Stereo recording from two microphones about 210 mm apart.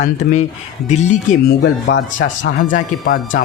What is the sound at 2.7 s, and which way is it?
Speech, 40° left (ahead or behind).